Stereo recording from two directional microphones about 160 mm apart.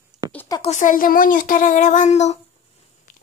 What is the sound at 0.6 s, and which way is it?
A child's voice, 45° left (ahead or behind).